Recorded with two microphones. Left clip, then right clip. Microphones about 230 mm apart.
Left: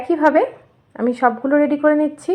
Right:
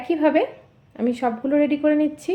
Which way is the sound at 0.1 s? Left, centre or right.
Centre.